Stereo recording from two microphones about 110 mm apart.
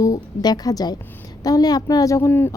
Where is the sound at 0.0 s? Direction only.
35° left (ahead or behind).